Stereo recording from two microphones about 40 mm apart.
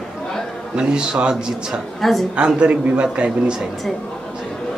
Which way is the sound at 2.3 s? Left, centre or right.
Right.